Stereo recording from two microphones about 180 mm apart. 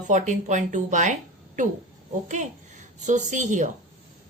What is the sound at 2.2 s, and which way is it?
A woman's voice, 40° right (ahead or behind).